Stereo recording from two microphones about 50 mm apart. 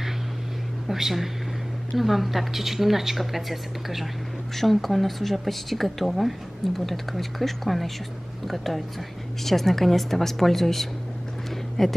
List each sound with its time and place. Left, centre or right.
0.8 s speech: centre